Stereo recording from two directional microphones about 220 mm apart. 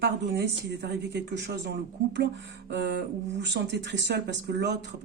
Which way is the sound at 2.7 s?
50° right (ahead or behind).